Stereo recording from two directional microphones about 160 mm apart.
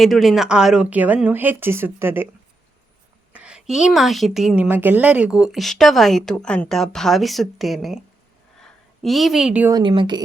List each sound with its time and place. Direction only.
0.0 s speech: centre (ahead or behind)
3.3 s a woman's voice: 5° right (ahead or behind)
9.7 s a woman's voice: 30° right (ahead or behind)